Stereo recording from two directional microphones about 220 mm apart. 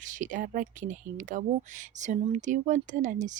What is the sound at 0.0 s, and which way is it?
Speech, 35° right (ahead or behind).